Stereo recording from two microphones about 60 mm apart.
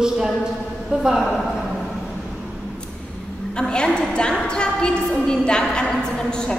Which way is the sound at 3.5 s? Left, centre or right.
Centre.